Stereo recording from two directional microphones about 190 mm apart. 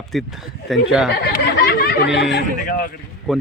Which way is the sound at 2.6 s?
50° left (ahead or behind).